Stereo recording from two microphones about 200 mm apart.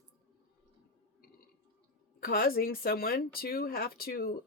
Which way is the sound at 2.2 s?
45° left (ahead or behind).